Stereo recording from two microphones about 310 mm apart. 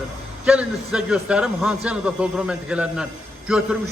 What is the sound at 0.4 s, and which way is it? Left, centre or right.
A man's voice, centre.